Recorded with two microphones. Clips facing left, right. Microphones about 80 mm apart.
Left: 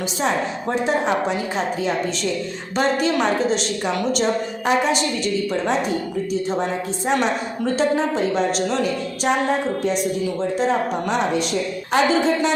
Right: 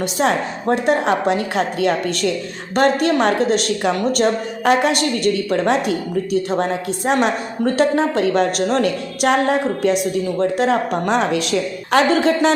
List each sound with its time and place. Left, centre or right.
0.9 s a woman's voice: right